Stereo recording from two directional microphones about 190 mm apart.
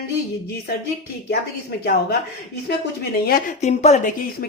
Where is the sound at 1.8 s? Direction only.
60° left (ahead or behind).